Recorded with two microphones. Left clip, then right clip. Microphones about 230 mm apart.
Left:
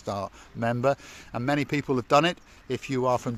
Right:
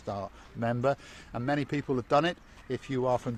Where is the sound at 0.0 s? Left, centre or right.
Left.